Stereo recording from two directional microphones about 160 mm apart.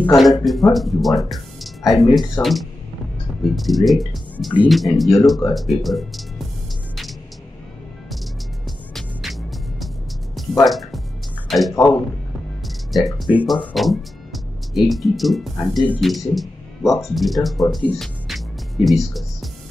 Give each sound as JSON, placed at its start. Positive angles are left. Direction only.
{"t": 0.0, "sound": "speech", "side_deg": 0}
{"t": 8.6, "sound": "music", "side_deg": 0}
{"t": 11.4, "sound": "a sound", "side_deg": 0}
{"t": 11.7, "sound": "speech", "side_deg": 20}
{"t": 12.6, "sound": "music", "side_deg": 0}
{"t": 13.7, "sound": "speech", "side_deg": 0}
{"t": 18.9, "sound": "music", "side_deg": 0}